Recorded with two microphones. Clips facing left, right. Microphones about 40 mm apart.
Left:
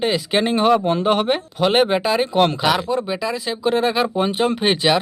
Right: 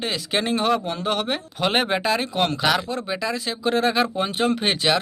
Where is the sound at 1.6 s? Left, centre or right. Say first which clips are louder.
Left 5 dB; centre.